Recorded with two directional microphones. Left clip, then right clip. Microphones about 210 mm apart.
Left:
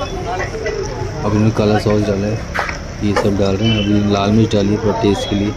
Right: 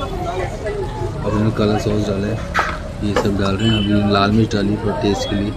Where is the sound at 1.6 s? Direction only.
20° left (ahead or behind).